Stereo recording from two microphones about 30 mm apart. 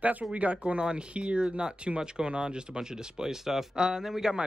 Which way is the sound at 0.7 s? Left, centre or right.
Right.